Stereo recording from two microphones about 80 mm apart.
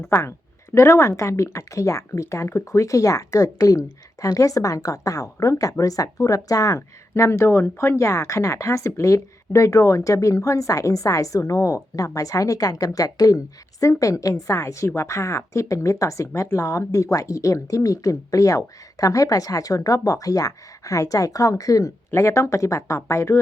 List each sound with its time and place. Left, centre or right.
0.0 s speech: left